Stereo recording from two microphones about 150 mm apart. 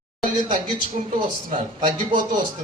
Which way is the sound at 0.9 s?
50° right (ahead or behind).